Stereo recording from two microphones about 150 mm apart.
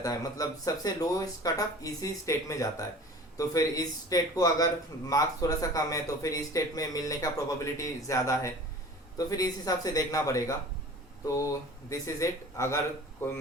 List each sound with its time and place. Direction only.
0.0 s a man's voice: 25° left (ahead or behind)